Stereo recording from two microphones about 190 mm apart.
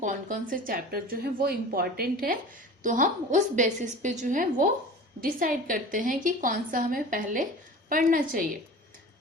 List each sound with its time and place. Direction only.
0.0 s a woman's voice: 45° right (ahead or behind)